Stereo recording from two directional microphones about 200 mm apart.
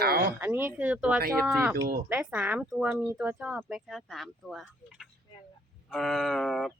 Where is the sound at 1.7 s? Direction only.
50° right (ahead or behind).